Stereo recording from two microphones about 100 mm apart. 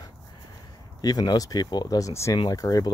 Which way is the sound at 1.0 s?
40° left (ahead or behind).